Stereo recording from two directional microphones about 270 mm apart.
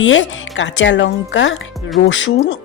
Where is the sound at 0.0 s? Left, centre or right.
Left.